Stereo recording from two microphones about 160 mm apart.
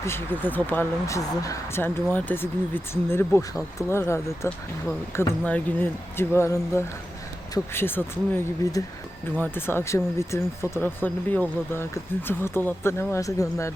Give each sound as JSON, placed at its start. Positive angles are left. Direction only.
{"t": 0.0, "sound": "speech", "side_deg": 15}